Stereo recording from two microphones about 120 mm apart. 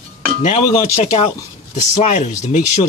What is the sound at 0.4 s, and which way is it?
Speech, 60° left (ahead or behind).